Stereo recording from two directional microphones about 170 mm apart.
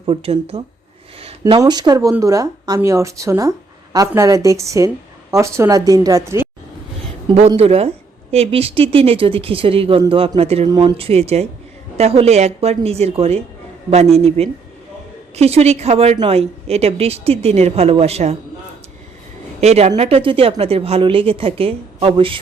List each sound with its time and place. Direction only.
0.0 s speech: 35° right (ahead or behind)
1.2 s a sound: 35° right (ahead or behind)
1.5 s a woman's voice: 25° right (ahead or behind)
7.3 s speech: 35° right (ahead or behind)
19.6 s speech: 40° right (ahead or behind)